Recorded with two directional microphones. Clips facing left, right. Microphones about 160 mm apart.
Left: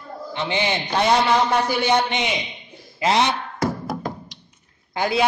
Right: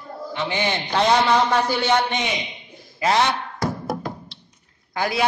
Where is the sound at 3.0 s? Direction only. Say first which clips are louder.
Even; 20° left (ahead or behind).